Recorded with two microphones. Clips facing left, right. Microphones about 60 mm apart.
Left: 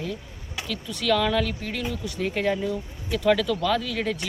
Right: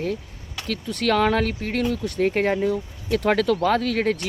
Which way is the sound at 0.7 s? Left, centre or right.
Right.